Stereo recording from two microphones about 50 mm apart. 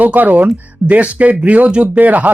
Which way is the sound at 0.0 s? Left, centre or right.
Right.